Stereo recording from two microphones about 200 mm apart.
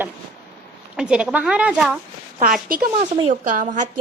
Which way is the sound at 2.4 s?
45° right (ahead or behind).